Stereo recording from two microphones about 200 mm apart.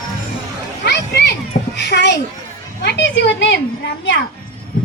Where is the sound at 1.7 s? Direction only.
55° left (ahead or behind).